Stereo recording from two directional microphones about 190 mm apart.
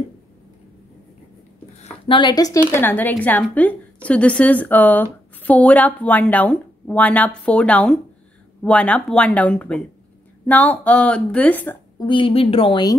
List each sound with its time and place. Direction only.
1.8 s a woman's voice: 25° left (ahead or behind); by 11.8 s 10° left (ahead or behind)
12.1 s speech: 30° left (ahead or behind)